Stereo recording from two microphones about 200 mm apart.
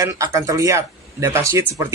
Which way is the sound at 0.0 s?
15° right (ahead or behind).